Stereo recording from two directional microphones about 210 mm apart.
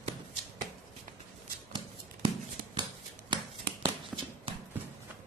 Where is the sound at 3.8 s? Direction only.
20° right (ahead or behind).